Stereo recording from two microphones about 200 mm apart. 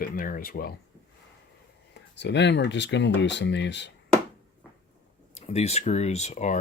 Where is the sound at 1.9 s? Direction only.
60° left (ahead or behind).